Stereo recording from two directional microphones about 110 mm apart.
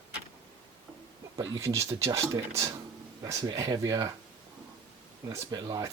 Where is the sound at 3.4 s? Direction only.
40° right (ahead or behind).